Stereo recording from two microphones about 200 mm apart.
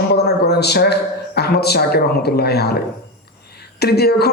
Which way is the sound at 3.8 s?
55° left (ahead or behind).